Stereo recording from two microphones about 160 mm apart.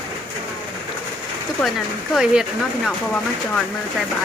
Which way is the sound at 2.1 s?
5° right (ahead or behind).